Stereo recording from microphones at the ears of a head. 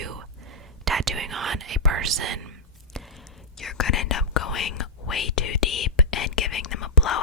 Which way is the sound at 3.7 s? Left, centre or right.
Left.